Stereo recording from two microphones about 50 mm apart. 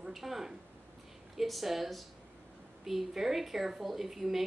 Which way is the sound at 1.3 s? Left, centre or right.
Centre.